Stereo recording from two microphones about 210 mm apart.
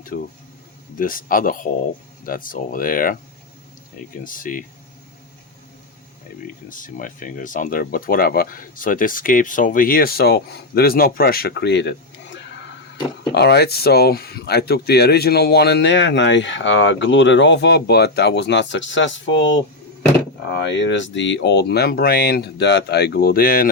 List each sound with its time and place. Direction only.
0.1 s speech: 40° left (ahead or behind)
4.2 s speech: 40° left (ahead or behind)
6.7 s speech: 40° left (ahead or behind)